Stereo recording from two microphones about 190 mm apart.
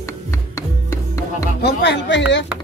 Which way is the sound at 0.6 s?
15° left (ahead or behind).